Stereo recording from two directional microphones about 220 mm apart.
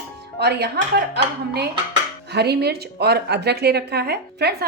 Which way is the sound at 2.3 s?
50° right (ahead or behind).